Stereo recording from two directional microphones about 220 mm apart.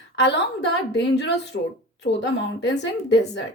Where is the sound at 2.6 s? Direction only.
55° left (ahead or behind).